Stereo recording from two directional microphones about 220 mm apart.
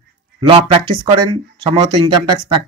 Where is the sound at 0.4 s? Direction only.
25° right (ahead or behind).